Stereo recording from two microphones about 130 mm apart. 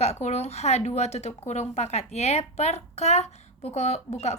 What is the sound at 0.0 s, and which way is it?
Speech, 55° left (ahead or behind).